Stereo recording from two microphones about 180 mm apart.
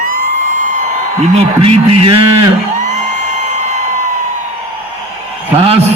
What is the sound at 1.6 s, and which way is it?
Speech, 35° right (ahead or behind).